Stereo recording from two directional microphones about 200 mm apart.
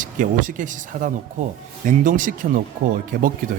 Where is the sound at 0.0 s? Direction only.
40° right (ahead or behind).